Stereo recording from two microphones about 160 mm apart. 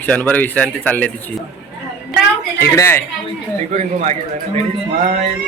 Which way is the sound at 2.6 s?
15° left (ahead or behind).